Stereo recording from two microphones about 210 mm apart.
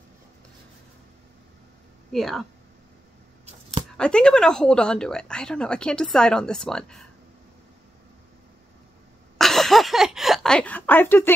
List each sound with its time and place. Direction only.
2.1 s speech: centre (ahead or behind)
3.9 s speech: 5° left (ahead or behind)
9.4 s a sound: centre (ahead or behind)